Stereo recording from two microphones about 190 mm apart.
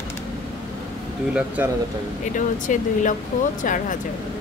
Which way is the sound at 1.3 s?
10° right (ahead or behind).